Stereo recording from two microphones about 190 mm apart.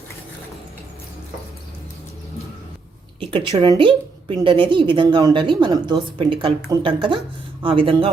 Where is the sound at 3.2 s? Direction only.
30° right (ahead or behind).